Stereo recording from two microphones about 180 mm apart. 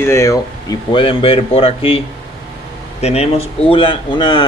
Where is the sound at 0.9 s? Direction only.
30° left (ahead or behind).